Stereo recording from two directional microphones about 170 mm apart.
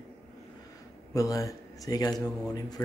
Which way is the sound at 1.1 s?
20° left (ahead or behind).